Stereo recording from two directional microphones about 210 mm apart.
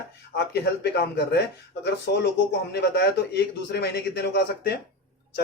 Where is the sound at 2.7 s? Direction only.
50° left (ahead or behind).